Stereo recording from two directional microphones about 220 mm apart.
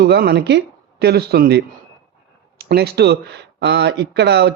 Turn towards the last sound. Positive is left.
turn(degrees=-50)  # may be behind; listen again after turning